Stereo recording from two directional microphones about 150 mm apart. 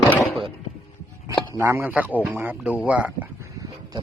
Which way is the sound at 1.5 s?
15° right (ahead or behind).